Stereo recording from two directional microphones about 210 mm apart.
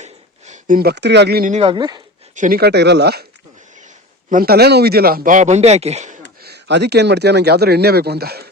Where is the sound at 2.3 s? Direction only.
40° right (ahead or behind).